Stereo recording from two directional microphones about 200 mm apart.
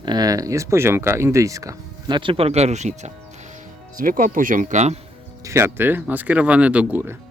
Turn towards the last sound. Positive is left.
turn(degrees=-10)  # may be behind; listen again after turning